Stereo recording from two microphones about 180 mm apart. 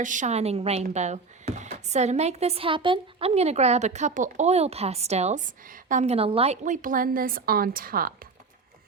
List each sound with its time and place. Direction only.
0.0 s speech: 45° right (ahead or behind)